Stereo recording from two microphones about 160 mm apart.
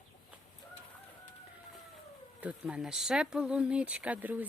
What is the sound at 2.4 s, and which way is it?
A woman's voice, 10° right (ahead or behind).